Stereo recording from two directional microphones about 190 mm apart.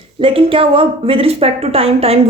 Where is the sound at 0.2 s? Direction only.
30° right (ahead or behind).